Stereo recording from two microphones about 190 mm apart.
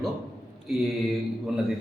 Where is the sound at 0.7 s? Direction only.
Centre (ahead or behind).